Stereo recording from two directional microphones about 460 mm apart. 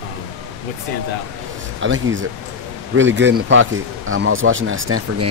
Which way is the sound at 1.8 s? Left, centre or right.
Right.